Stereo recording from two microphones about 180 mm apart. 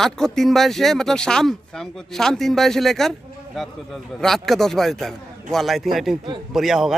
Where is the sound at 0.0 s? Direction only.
Centre (ahead or behind).